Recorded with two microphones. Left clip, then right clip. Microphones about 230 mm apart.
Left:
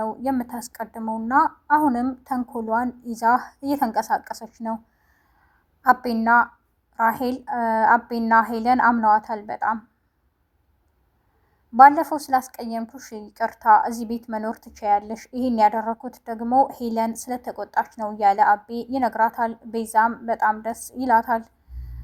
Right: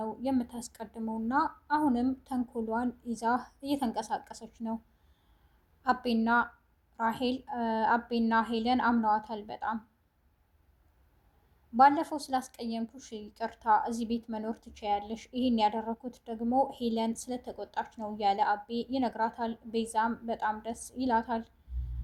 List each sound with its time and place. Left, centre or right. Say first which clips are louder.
0.0 s a woman's voice: left 8 dB; left
5.8 s a woman's voice: left 11 dB; left
11.8 s a woman's voice: left 11 dB; left